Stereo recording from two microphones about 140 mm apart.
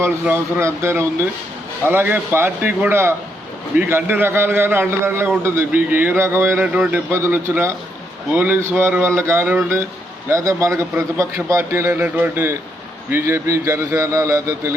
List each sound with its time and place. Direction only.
0.0 s a man's voice: 15° right (ahead or behind)